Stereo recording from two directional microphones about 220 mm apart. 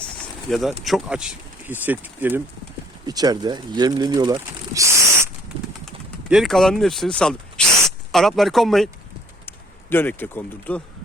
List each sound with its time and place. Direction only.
0.5 s speech: centre (ahead or behind)
6.3 s speech: centre (ahead or behind)